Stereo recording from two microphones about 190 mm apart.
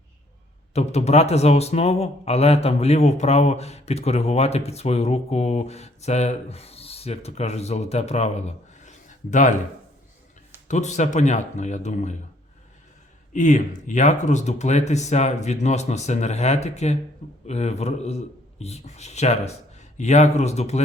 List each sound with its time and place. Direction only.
0.7 s a man's voice: 35° left (ahead or behind)
10.7 s a man's voice: 40° left (ahead or behind)
13.3 s a man's voice: 40° left (ahead or behind)